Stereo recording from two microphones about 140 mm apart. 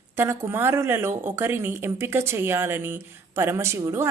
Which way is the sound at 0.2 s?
15° right (ahead or behind).